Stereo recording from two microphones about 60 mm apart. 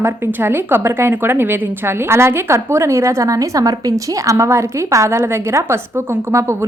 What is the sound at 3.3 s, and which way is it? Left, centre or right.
A woman's voice, right.